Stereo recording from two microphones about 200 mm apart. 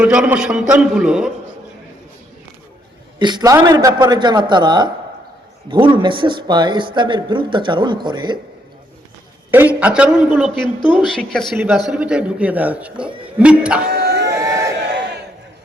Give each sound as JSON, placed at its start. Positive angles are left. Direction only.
{"t": 0.0, "sound": "a man's voice", "side_deg": -5}
{"t": 3.2, "sound": "speech", "side_deg": -20}
{"t": 9.5, "sound": "a man's voice", "side_deg": -10}
{"t": 11.5, "sound": "a man's voice", "side_deg": -10}
{"t": 13.8, "sound": "a sound", "side_deg": -55}
{"t": 14.3, "sound": "crowd", "side_deg": -15}